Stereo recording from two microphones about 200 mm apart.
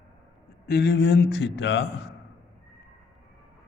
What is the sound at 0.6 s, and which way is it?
Speech, 55° left (ahead or behind).